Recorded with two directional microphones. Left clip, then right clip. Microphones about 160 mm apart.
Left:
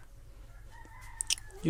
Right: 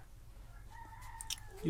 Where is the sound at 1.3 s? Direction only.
25° left (ahead or behind).